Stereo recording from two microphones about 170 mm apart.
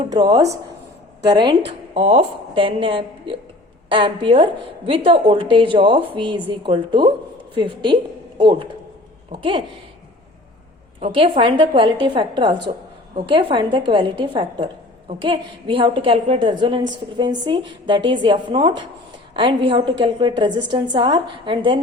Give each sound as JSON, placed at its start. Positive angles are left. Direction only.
{"t": 0.1, "sound": "a woman's voice", "side_deg": -25}
{"t": 11.0, "sound": "a woman's voice", "side_deg": -35}